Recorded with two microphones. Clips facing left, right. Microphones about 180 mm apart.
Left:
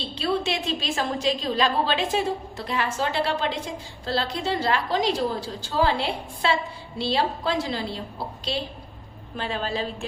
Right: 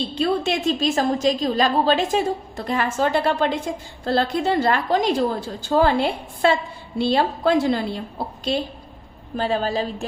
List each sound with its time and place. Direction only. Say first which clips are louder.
0.1 s a woman's voice: right 1 dB; 50° right (ahead or behind)
9.3 s a woman's voice: right 6 dB; 40° right (ahead or behind)